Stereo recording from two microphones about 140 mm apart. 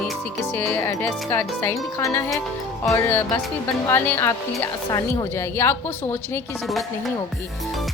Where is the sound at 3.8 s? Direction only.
15° left (ahead or behind).